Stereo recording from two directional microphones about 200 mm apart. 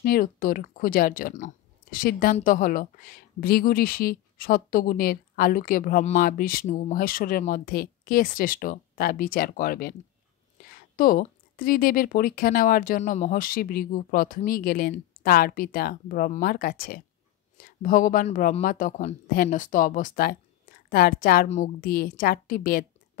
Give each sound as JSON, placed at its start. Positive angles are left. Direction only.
{"t": 0.0, "sound": "speech", "side_deg": 45}